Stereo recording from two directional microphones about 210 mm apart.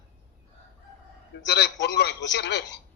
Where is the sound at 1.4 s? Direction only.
50° left (ahead or behind).